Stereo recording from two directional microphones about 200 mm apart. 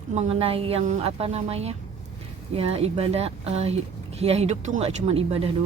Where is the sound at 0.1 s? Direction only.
30° right (ahead or behind).